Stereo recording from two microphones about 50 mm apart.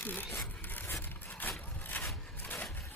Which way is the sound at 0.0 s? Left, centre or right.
Left.